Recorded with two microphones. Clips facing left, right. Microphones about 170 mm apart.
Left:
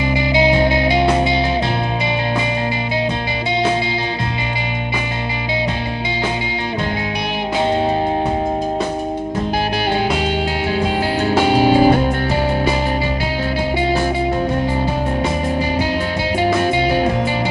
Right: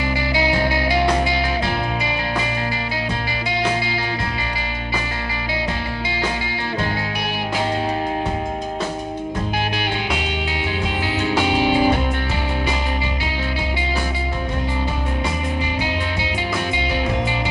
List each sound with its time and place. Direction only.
0.1 s music: 20° left (ahead or behind)
10.8 s music: 45° left (ahead or behind)
16.3 s music: 45° left (ahead or behind)